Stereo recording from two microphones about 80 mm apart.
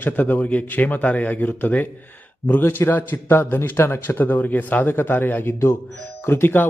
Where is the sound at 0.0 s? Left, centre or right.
Left.